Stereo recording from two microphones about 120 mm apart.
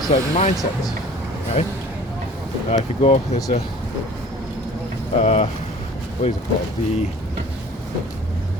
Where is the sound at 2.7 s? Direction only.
65° left (ahead or behind).